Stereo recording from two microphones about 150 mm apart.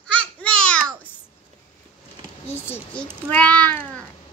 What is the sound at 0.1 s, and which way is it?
Babbling, 10° left (ahead or behind).